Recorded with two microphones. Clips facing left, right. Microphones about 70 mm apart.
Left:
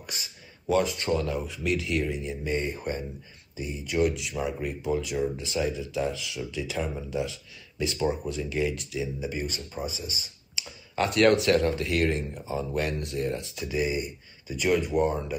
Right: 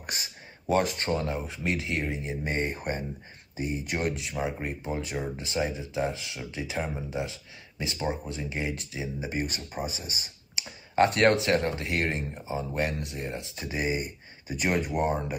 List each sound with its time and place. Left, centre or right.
0.7 s speech: right